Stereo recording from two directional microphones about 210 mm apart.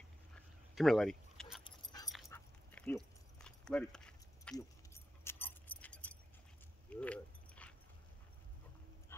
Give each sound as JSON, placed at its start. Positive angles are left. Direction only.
{"t": 0.3, "sound": "a sound", "side_deg": 0}
{"t": 1.6, "sound": "keys jangling", "side_deg": 20}
{"t": 2.2, "sound": "dog", "side_deg": 10}
{"t": 4.6, "sound": "keys jangling", "side_deg": 10}